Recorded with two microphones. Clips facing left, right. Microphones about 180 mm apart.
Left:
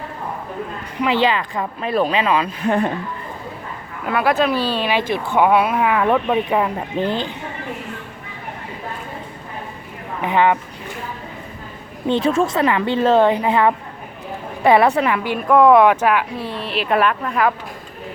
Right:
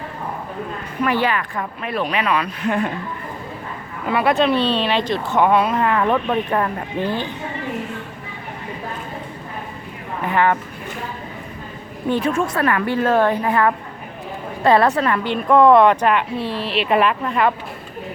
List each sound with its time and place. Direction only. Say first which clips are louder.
1.3 s speech: left 2 dB; 25° left (ahead or behind)
4.0 s speech: right 1 dB; centre (ahead or behind); by 7.2 s 15° left (ahead or behind)
10.2 s a woman's voice: left 2 dB; 20° left (ahead or behind)
12.0 s a woman's voice: left 2 dB; 25° left (ahead or behind); by 17.5 s centre (ahead or behind)